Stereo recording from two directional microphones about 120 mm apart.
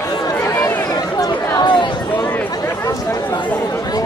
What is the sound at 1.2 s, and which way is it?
Chatter, 35° left (ahead or behind).